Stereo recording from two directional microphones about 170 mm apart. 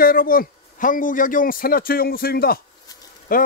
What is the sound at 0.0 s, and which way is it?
A man's voice, 60° left (ahead or behind).